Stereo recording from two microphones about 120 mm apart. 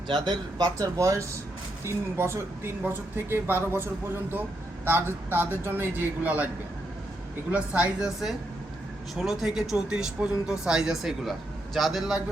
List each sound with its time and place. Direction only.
0.1 s a man's voice: 35° right (ahead or behind); by 6.5 s 15° right (ahead or behind)
7.5 s a man's voice: 10° right (ahead or behind)